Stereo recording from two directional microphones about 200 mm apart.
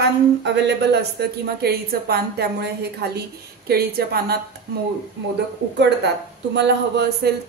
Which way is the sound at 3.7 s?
50° right (ahead or behind).